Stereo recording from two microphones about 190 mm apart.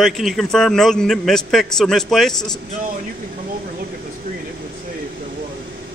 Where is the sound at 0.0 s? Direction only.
Centre (ahead or behind).